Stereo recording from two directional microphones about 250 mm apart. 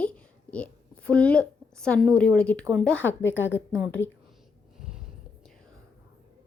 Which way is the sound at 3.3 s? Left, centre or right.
Left.